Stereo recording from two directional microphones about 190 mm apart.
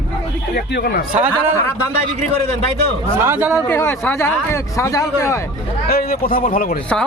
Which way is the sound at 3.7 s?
10° left (ahead or behind).